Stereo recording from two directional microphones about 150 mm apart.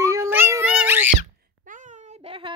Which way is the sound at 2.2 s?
35° right (ahead or behind).